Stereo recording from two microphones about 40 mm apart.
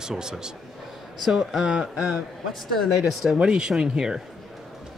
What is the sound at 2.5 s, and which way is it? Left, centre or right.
Speech, centre.